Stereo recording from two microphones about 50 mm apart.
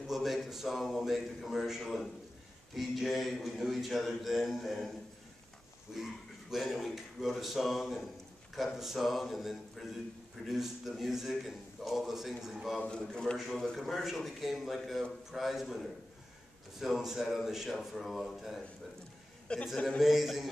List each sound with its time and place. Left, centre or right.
0.0 s a man's voice: centre
5.9 s a man's voice: centre
13.1 s a man's voice: centre
13.4 s a man's voice: centre
19.4 s a sound: centre
20.0 s a man's voice: centre